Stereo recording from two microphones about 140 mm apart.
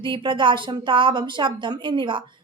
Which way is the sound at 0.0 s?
35° right (ahead or behind).